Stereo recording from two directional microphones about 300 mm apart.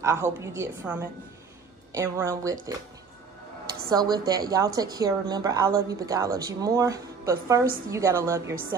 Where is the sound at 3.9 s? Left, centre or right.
Centre.